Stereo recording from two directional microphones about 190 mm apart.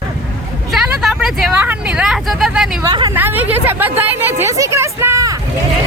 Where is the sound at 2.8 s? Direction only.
20° right (ahead or behind).